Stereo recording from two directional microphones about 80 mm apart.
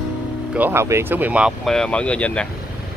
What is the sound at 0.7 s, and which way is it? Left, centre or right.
Speech, right.